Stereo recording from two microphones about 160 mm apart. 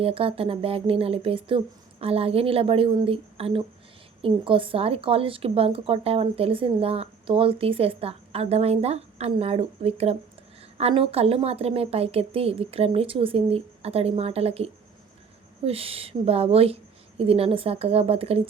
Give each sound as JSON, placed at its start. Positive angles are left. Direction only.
{"t": 0.0, "sound": "speech", "side_deg": -35}